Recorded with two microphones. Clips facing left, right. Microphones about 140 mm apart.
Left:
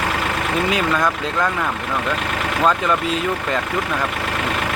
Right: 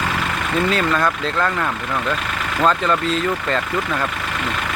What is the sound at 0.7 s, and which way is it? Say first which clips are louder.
Speech: even; 10° left (ahead or behind).